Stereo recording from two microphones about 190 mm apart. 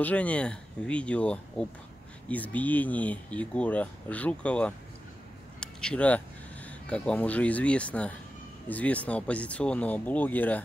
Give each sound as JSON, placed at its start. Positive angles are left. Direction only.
{"t": 0.0, "sound": "speech", "side_deg": 5}